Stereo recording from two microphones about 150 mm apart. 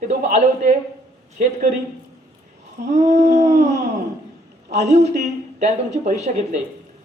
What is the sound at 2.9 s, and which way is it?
Dog, 50° right (ahead or behind).